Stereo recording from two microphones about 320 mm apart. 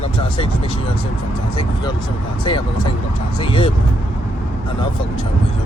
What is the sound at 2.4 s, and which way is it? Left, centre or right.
Speech, centre.